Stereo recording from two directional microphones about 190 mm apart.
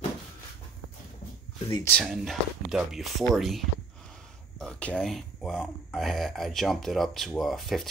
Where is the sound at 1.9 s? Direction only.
Centre (ahead or behind).